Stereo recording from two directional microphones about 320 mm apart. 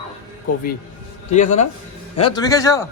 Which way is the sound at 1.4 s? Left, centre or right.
Left.